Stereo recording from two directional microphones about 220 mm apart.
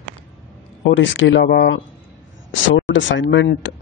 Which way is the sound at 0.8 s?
55° left (ahead or behind).